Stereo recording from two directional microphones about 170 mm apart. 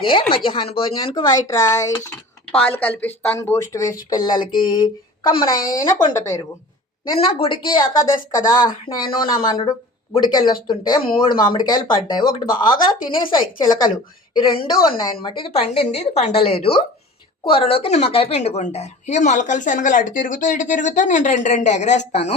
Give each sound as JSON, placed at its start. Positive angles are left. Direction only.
{"t": 0.0, "sound": "speech", "side_deg": 30}
{"t": 2.5, "sound": "a woman's voice", "side_deg": 5}
{"t": 7.3, "sound": "a woman's voice", "side_deg": 30}